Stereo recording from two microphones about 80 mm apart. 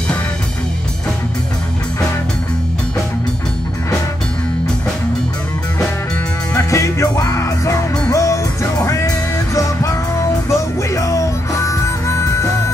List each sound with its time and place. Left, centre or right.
6.5 s music: left